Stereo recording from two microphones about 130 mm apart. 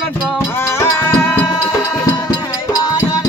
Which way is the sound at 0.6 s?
20° left (ahead or behind).